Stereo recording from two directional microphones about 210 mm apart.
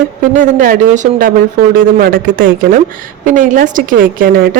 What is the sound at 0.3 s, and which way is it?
A woman's voice, 40° right (ahead or behind).